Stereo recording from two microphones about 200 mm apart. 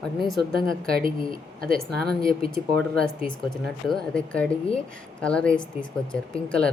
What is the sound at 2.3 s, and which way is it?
Speech, 25° left (ahead or behind).